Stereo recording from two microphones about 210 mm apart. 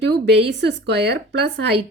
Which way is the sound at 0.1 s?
55° right (ahead or behind).